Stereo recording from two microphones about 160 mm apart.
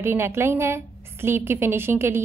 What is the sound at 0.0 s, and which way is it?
A woman's voice, 15° right (ahead or behind).